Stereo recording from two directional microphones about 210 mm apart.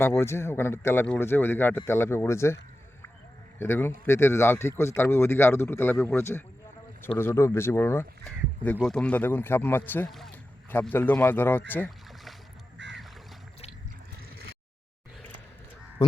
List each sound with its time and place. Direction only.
0.0 s speech: 10° left (ahead or behind)
3.6 s speech: 10° left (ahead or behind)
11.7 s boat: 5° left (ahead or behind)
12.8 s boat: 55° right (ahead or behind)